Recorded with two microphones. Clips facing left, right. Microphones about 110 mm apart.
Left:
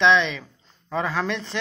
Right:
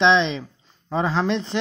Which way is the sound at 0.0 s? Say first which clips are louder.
Right 1 dB; 25° right (ahead or behind).